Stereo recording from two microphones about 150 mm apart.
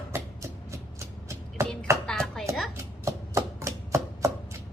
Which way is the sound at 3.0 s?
20° right (ahead or behind).